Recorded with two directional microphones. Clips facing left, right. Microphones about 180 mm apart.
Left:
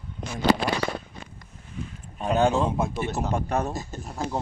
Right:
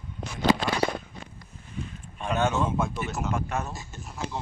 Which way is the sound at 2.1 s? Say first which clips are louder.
Left 4 dB; 35° left (ahead or behind).